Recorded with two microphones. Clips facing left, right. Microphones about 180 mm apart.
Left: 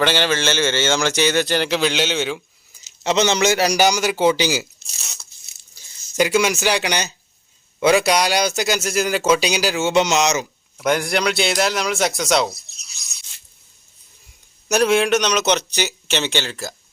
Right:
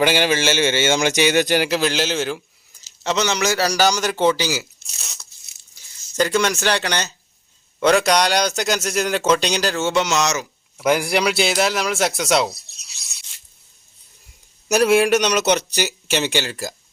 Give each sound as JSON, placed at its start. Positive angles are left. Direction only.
{"t": 0.0, "sound": "a man's voice", "side_deg": -10}
{"t": 3.0, "sound": "speech", "side_deg": 20}
{"t": 4.4, "sound": "speech", "side_deg": 20}
{"t": 6.1, "sound": "speech", "side_deg": 10}
{"t": 10.8, "sound": "a man's voice", "side_deg": -5}
{"t": 14.7, "sound": "a man's voice", "side_deg": -5}